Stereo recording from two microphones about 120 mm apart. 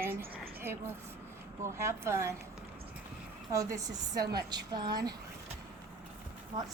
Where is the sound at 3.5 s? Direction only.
25° right (ahead or behind).